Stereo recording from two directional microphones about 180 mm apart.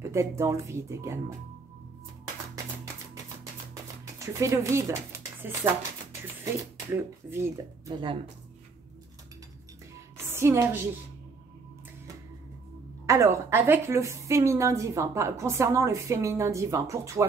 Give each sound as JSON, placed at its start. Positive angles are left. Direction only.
{"t": 0.1, "sound": "a woman's voice", "side_deg": -15}
{"t": 4.2, "sound": "speech", "side_deg": -15}
{"t": 7.0, "sound": "a woman's voice", "side_deg": -10}
{"t": 10.3, "sound": "a woman's voice", "side_deg": -15}
{"t": 13.0, "sound": "a woman's voice", "side_deg": -15}